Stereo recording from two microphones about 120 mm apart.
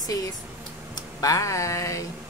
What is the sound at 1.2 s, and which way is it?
Speech, 30° left (ahead or behind).